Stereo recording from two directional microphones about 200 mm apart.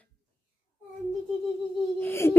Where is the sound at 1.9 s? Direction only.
10° left (ahead or behind).